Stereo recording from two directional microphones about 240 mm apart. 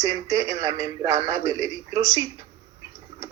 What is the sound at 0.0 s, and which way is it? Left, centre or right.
Speech, centre.